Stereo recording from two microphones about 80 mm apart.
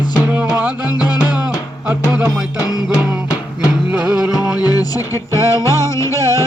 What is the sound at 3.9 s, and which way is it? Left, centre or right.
Music, centre.